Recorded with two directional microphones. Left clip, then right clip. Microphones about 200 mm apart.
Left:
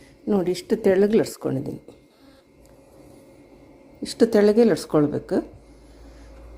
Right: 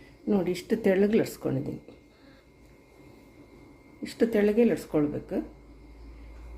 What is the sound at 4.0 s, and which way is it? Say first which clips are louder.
Speech: left 7 dB; 25° left (ahead or behind).